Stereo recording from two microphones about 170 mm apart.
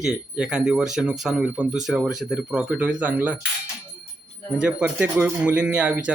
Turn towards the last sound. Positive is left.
turn(degrees=-10)  # may be behind; listen again after turning